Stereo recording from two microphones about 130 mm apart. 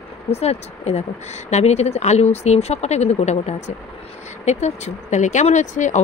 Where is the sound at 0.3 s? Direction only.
55° left (ahead or behind).